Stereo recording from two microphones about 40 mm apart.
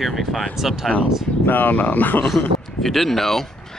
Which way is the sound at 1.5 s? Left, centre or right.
Left.